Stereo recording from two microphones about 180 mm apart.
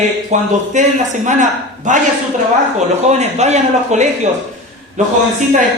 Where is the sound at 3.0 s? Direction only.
40° right (ahead or behind).